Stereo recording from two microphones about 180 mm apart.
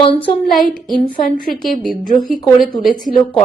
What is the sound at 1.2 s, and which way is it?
Speech, 50° left (ahead or behind).